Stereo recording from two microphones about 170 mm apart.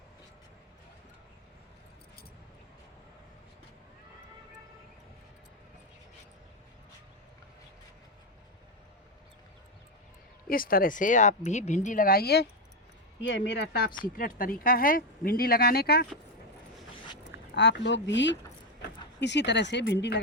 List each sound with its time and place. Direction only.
10.5 s speech: 60° left (ahead or behind)
13.2 s speech: 90° left
14.0 s speech: 55° left (ahead or behind)
17.5 s speech: 90° left